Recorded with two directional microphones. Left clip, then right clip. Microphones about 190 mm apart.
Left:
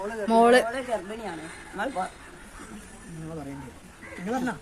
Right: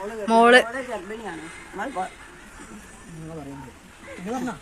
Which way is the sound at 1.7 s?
20° left (ahead or behind).